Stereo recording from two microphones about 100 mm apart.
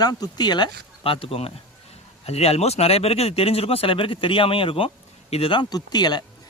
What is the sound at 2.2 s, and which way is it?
Speech, 90° left.